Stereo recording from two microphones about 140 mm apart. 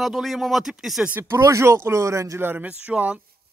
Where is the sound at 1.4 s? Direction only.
20° right (ahead or behind).